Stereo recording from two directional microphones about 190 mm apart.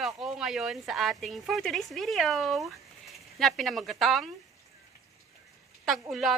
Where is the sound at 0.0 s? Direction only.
Centre (ahead or behind).